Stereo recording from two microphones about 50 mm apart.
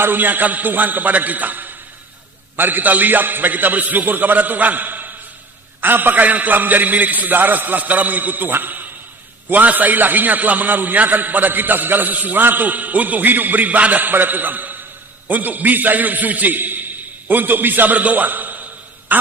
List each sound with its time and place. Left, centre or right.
0.0 s a man's voice: right
14.0 s a man's voice: right